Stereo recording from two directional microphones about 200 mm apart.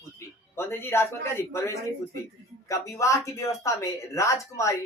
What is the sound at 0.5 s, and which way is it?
Speech, 10° left (ahead or behind).